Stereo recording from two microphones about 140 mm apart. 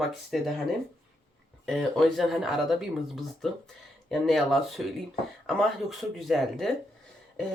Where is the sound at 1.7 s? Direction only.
Centre (ahead or behind).